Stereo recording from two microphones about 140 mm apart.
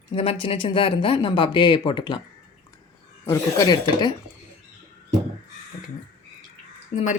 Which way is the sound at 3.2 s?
30° left (ahead or behind).